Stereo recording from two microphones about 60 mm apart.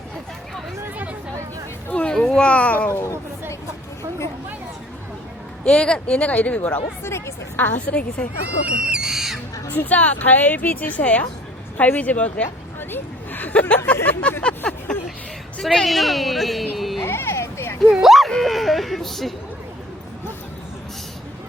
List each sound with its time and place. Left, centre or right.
1.9 s a sound: left
2.1 s speech: centre
5.6 s speech: centre
7.0 s speech: left
7.5 s a woman's voice: left
9.0 s crow: centre
9.6 s speech: left
14.4 s a sound: centre
15.6 s a woman's voice: centre
17.0 s a sound: left
18.0 s a sound: centre
18.3 s a woman's voice: centre